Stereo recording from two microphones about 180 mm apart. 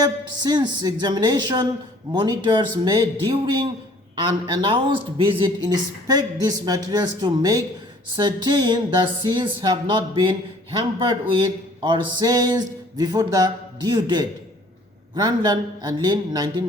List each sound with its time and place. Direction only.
0.0 s speech: 25° right (ahead or behind)